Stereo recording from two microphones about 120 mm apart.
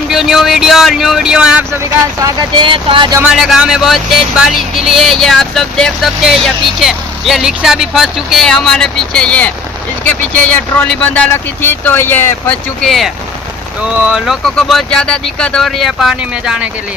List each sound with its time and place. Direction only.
0.1 s speech: 5° right (ahead or behind)
2.6 s speech: 45° right (ahead or behind)
3.4 s speech: 5° right (ahead or behind); by 12.5 s 15° left (ahead or behind)
12.8 s speech: centre (ahead or behind)
14.4 s speech: centre (ahead or behind)